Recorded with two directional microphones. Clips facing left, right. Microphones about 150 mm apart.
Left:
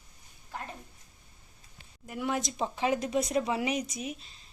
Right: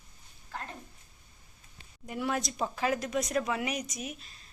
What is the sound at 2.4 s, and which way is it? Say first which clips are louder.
A woman's voice: left 1 dB; 25° left (ahead or behind).